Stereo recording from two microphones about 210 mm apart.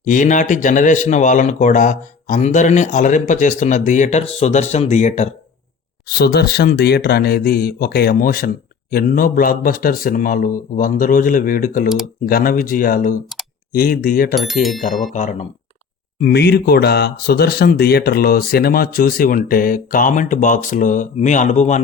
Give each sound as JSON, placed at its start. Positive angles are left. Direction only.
{"t": 0.0, "sound": "speech", "side_deg": 35}
{"t": 6.1, "sound": "speech", "side_deg": 50}
{"t": 16.2, "sound": "speech", "side_deg": 50}